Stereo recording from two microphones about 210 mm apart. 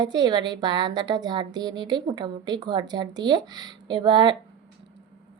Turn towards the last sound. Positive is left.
turn(degrees=-25)  # may be behind; listen again after turning